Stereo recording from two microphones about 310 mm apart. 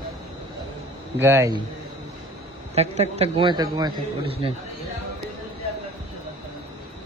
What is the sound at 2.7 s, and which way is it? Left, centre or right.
A man's voice, right.